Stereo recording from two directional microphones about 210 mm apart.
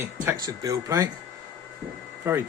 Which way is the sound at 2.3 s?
10° right (ahead or behind).